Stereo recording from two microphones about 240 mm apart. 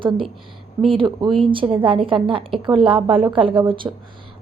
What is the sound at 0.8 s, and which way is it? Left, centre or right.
Speech, centre.